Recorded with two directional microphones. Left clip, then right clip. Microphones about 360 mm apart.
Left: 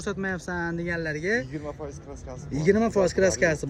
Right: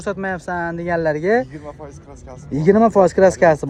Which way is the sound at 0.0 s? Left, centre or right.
Centre.